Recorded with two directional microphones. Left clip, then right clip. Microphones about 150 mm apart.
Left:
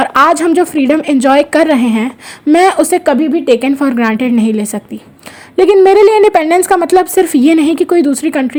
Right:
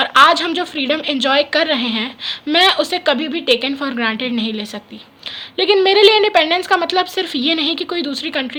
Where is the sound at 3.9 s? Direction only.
35° left (ahead or behind).